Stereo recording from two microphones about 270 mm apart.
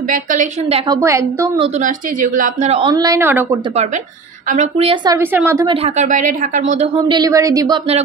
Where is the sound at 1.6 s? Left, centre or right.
Right; by 3.6 s centre.